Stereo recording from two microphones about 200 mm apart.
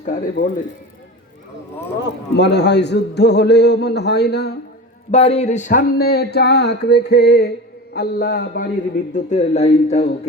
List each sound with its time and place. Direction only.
0.0 s speech: 40° left (ahead or behind)
2.3 s a man's voice: 60° left (ahead or behind)
5.1 s speech: 30° left (ahead or behind); by 8.7 s 45° left (ahead or behind)
9.1 s speech: 35° left (ahead or behind)